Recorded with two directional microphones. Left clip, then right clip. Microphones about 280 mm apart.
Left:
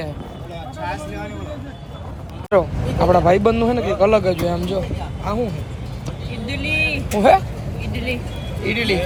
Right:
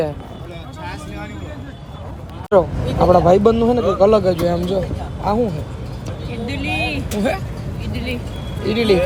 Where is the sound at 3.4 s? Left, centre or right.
Left.